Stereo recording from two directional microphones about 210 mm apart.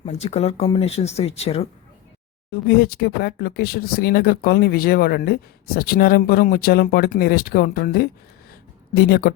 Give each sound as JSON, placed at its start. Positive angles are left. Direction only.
{"t": 0.0, "sound": "speech", "side_deg": 30}
{"t": 2.5, "sound": "speech", "side_deg": 50}